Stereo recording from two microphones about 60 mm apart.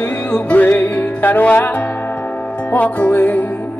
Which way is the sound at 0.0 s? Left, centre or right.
Left.